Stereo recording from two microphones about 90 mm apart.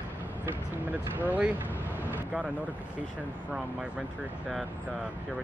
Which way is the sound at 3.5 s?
10° right (ahead or behind).